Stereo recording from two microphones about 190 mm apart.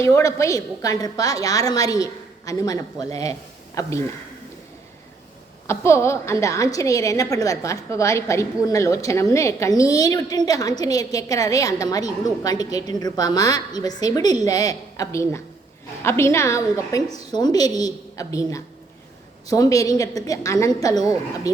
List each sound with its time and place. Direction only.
0.0 s a woman's voice: 15° left (ahead or behind)
5.6 s a woman's voice: 15° left (ahead or behind)